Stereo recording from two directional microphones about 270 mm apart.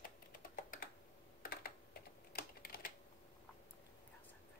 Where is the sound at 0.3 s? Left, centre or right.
Left.